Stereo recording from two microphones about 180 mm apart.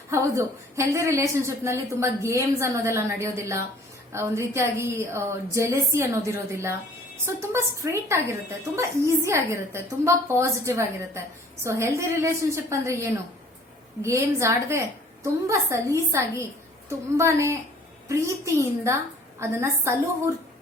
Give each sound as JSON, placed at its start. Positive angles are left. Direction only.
{"t": 0.1, "sound": "a woman's voice", "side_deg": -15}